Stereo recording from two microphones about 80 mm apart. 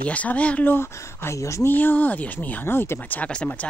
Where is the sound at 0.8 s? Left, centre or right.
Left.